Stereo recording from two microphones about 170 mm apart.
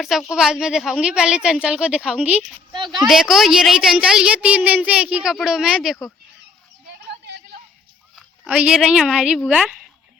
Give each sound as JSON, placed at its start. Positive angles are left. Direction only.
{"t": 0.0, "sound": "a woman's voice", "side_deg": 0}
{"t": 2.7, "sound": "speech", "side_deg": -25}
{"t": 3.1, "sound": "a woman's voice", "side_deg": 0}
{"t": 8.1, "sound": "speech", "side_deg": -5}